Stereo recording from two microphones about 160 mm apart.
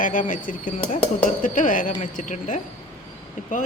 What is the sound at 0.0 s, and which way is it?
Speech, 55° left (ahead or behind).